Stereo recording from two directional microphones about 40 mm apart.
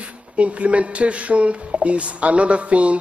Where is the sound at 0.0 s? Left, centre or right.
Right.